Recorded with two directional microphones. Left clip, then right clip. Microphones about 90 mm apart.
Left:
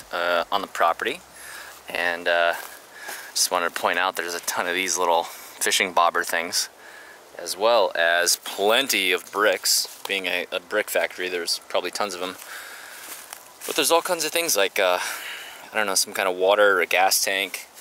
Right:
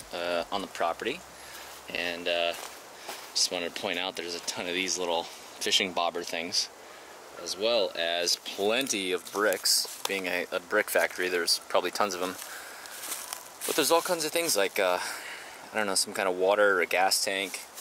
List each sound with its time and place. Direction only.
0.1 s speech: 35° left (ahead or behind)
8.6 s speech: 30° left (ahead or behind); by 12.4 s 10° left (ahead or behind)
13.7 s speech: 20° left (ahead or behind)